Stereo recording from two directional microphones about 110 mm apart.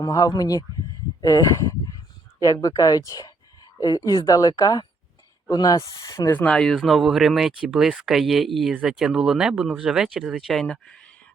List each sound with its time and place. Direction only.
0.0 s a woman's voice: 35° left (ahead or behind)
6.3 s speech: 10° left (ahead or behind)